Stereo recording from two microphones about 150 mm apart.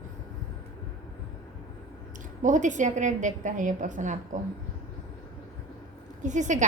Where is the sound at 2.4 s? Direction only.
55° right (ahead or behind).